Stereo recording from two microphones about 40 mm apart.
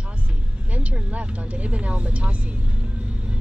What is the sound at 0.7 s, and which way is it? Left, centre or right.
Speech, right.